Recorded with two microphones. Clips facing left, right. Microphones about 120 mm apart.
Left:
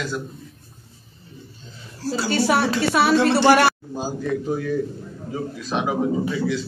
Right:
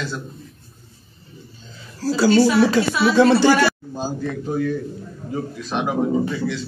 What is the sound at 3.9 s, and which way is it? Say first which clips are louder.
A man's voice: left 1 dB; 5° left (ahead or behind).